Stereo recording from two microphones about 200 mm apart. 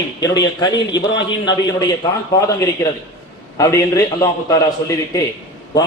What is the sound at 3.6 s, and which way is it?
A man's voice, 15° left (ahead or behind).